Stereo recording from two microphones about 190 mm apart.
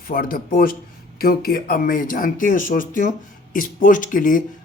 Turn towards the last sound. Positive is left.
turn(degrees=45)  # may be behind; listen again after turning